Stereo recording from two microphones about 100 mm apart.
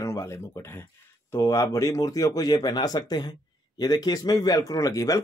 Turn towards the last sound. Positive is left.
turn(degrees=35)  # may be behind; listen again after turning